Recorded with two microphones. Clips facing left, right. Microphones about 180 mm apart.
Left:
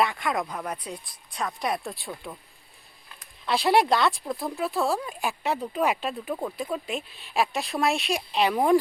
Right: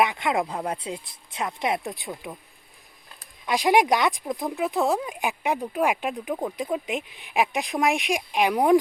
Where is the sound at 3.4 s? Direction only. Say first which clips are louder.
Right 1 dB; 15° right (ahead or behind).